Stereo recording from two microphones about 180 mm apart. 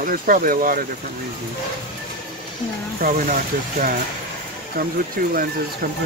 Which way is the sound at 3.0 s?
50° right (ahead or behind).